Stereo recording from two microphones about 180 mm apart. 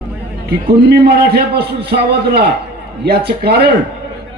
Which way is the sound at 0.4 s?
65° right (ahead or behind).